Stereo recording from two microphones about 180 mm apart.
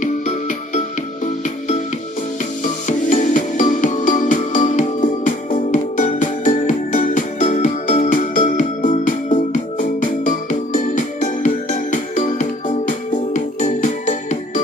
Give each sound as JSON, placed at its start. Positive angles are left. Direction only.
{"t": 0.0, "sound": "music", "side_deg": 45}
{"t": 2.8, "sound": "music", "side_deg": 45}